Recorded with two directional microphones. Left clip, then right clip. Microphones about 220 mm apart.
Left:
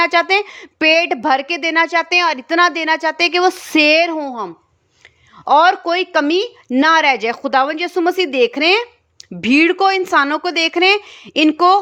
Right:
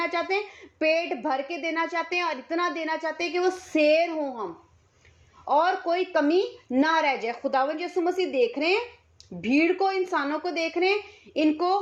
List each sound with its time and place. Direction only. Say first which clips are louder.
0.0 s a woman's voice: left 13 dB; 40° left (ahead or behind)
5.5 s speech: left 11 dB; 45° left (ahead or behind)